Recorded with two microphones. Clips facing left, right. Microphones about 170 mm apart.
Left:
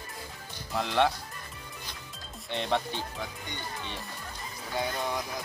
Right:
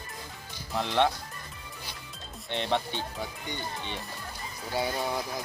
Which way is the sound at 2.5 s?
Centre (ahead or behind).